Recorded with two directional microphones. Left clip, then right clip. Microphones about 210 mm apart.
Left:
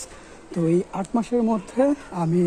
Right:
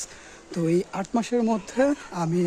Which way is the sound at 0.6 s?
15° right (ahead or behind).